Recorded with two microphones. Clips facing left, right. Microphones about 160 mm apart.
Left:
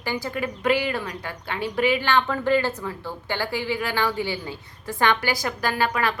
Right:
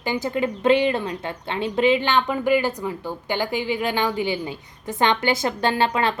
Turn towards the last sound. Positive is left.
turn(degrees=-25)  # may be behind; listen again after turning